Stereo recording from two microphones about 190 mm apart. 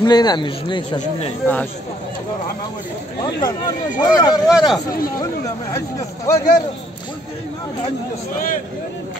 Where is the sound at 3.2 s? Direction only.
20° left (ahead or behind).